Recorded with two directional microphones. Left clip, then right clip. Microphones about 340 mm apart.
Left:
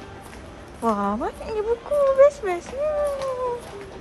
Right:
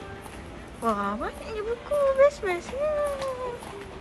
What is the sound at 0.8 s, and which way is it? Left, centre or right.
Speech, centre.